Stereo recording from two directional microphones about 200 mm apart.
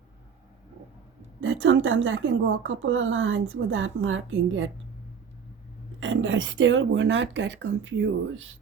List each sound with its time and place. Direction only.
1.4 s a woman's voice: 75° right (ahead or behind)
6.0 s a woman's voice: 75° right (ahead or behind)